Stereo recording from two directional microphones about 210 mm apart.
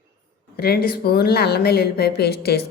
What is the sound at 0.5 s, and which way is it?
A woman's voice, 50° left (ahead or behind).